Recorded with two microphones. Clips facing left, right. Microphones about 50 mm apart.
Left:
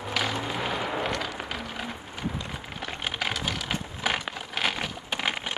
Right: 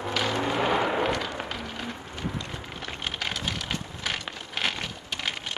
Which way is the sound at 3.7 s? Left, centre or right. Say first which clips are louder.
Left 3 dB; centre.